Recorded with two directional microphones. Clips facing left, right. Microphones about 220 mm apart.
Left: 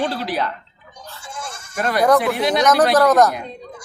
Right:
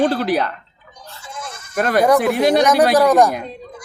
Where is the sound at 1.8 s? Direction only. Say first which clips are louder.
Right 2 dB; 50° right (ahead or behind).